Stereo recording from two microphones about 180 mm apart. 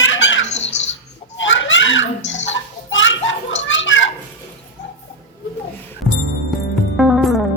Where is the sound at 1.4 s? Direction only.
90° left.